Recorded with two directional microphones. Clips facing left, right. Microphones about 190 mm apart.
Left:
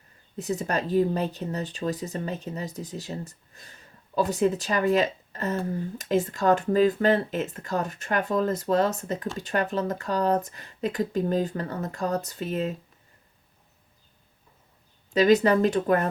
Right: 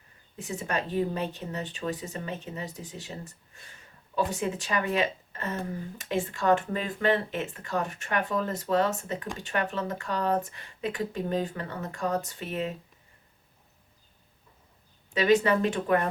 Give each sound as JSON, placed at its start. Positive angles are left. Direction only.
{"t": 0.3, "sound": "speech", "side_deg": 40}
{"t": 15.1, "sound": "speech", "side_deg": 40}